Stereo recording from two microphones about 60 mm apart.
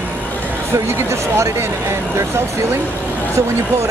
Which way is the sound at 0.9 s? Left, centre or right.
Right.